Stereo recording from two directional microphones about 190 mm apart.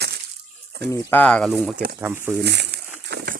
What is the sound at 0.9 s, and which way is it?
Speech, 10° left (ahead or behind).